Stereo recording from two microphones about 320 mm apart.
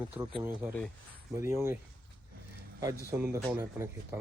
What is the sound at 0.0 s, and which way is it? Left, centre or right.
Speech, centre.